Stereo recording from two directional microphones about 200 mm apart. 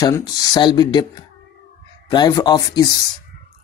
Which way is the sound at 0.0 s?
20° left (ahead or behind).